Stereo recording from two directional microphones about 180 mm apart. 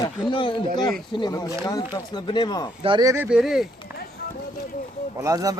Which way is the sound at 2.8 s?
20° right (ahead or behind).